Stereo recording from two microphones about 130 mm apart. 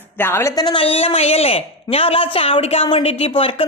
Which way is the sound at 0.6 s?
45° left (ahead or behind).